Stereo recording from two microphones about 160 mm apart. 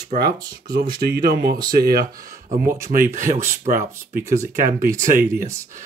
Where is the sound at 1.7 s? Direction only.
75° right (ahead or behind).